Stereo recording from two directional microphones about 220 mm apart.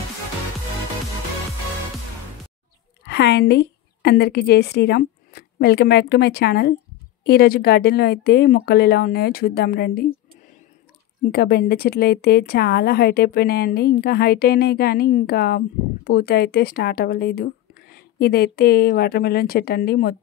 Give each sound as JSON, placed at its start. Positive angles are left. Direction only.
{"t": 3.1, "sound": "a woman's voice", "side_deg": 50}
{"t": 11.3, "sound": "a woman's voice", "side_deg": 45}